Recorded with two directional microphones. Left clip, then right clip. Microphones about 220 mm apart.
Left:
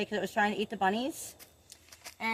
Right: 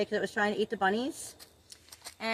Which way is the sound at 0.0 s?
40° left (ahead or behind).